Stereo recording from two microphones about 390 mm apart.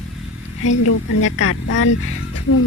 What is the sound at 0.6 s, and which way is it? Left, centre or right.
Speech, left.